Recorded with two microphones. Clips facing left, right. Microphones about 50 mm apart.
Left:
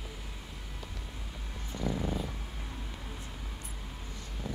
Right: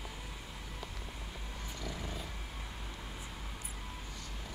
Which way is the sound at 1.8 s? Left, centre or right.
Left.